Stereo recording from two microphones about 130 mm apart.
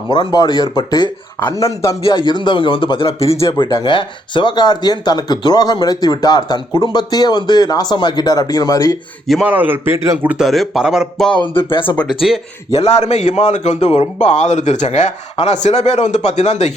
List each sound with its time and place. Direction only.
0.1 s speech: 35° left (ahead or behind)
2.0 s speech: 35° left (ahead or behind)
9.4 s a man's voice: 15° right (ahead or behind)
10.3 s speech: centre (ahead or behind)
11.5 s speech: 40° left (ahead or behind)
11.9 s speech: centre (ahead or behind)
12.7 s a man's voice: 60° left (ahead or behind)